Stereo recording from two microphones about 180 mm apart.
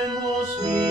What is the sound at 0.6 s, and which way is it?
Music, 20° right (ahead or behind).